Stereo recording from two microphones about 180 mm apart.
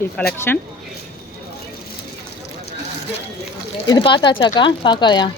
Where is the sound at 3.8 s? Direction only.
25° left (ahead or behind).